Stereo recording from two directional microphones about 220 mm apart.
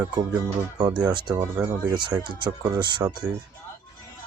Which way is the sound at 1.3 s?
10° right (ahead or behind).